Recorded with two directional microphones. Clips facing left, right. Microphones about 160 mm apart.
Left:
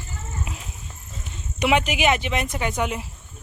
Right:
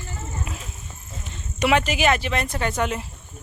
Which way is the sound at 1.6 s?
15° left (ahead or behind).